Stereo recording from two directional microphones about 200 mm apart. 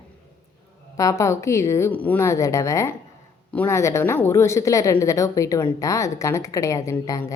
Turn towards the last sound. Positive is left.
turn(degrees=15)  # may be behind; listen again after turning